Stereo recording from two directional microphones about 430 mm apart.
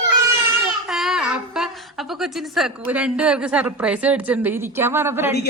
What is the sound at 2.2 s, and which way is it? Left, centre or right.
A woman's voice, centre.